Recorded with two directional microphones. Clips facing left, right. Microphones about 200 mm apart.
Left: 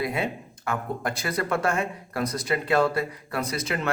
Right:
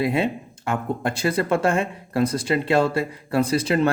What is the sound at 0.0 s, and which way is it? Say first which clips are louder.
Speech: right 6 dB; 25° right (ahead or behind).